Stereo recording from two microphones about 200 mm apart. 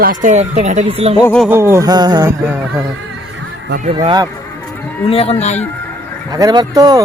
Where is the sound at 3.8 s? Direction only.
25° right (ahead or behind).